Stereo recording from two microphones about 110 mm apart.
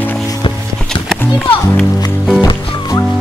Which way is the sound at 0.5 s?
50° left (ahead or behind).